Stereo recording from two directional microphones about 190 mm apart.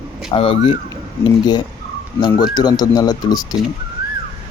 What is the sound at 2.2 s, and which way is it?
Speech, 20° left (ahead or behind).